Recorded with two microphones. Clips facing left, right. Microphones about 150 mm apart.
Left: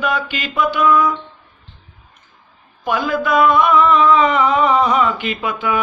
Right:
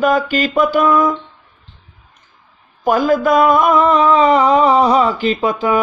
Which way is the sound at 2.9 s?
40° right (ahead or behind).